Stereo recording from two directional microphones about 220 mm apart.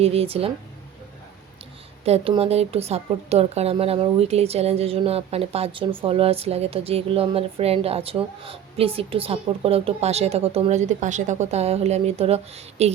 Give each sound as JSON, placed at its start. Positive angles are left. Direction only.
{"t": 0.0, "sound": "speech", "side_deg": -25}
{"t": 2.0, "sound": "speech", "side_deg": -25}